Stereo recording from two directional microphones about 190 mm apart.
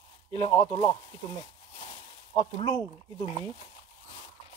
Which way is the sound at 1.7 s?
25° left (ahead or behind).